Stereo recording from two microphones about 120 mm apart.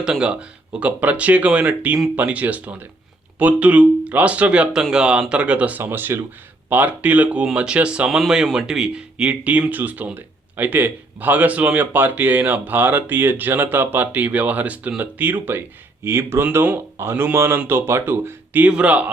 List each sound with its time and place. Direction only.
0.0 s speech: 5° right (ahead or behind)